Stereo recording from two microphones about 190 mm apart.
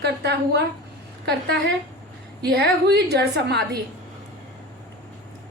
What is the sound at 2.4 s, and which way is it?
A woman's voice, 55° right (ahead or behind).